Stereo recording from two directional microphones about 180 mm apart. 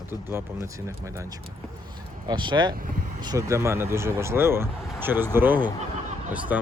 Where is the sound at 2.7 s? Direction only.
50° right (ahead or behind).